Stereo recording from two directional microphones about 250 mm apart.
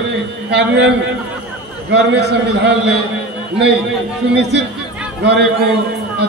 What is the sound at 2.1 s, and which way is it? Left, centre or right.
Speech, right.